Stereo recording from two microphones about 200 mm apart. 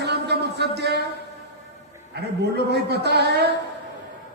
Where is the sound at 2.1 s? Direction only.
55° right (ahead or behind).